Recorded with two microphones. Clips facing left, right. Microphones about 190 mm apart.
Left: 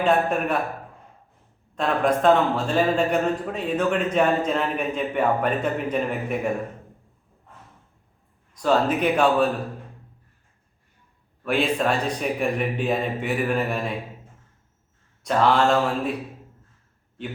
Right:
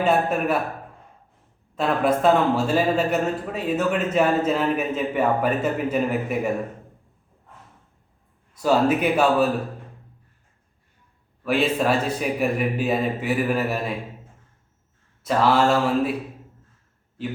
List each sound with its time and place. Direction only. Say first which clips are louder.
0.0 s a man's voice: even; 5° right (ahead or behind)
1.7 s a man's voice: right 1 dB; 5° right (ahead or behind)
8.5 s speech: right 2 dB; 5° right (ahead or behind)
11.4 s a man's voice: right 1 dB; 5° right (ahead or behind)
15.2 s a man's voice: right 1 dB; 5° right (ahead or behind)